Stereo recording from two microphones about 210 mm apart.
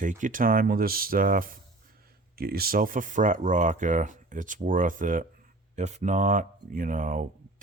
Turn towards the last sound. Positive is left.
turn(degrees=-40)  # may be behind; listen again after turning